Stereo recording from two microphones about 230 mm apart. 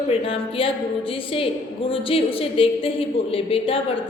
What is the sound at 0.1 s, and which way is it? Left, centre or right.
A woman's voice, left.